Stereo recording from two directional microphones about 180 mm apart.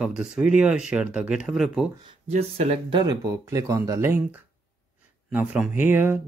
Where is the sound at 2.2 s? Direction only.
35° right (ahead or behind).